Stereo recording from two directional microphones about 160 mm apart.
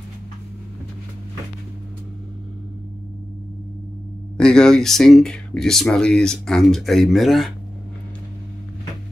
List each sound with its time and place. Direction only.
4.4 s speech: 5° left (ahead or behind)